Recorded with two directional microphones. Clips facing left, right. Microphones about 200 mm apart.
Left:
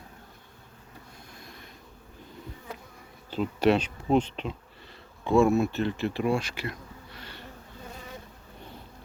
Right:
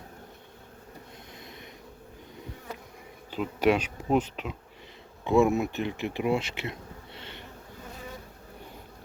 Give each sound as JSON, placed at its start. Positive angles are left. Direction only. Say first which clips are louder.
{"t": 3.2, "sound": "bee", "louder": "left 1 dB", "side_deg": -10}
{"t": 5.2, "sound": "speech", "louder": "left 1 dB", "side_deg": -20}